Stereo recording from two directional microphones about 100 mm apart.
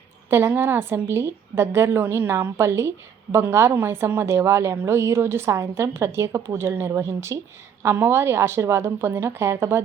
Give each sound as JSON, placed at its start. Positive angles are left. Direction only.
{"t": 0.3, "sound": "a woman's voice", "side_deg": -25}